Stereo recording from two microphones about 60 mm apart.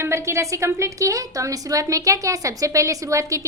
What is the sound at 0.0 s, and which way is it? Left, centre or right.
A woman's voice, right.